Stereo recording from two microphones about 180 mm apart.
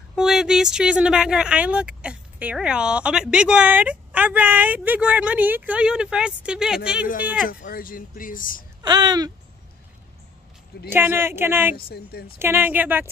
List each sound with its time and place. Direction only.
0.1 s speech: centre (ahead or behind)
7.4 s speech: 55° left (ahead or behind)
8.8 s speech: 25° right (ahead or behind)
10.9 s speech: 10° right (ahead or behind)
11.7 s speech: 60° left (ahead or behind)
12.4 s speech: 10° right (ahead or behind)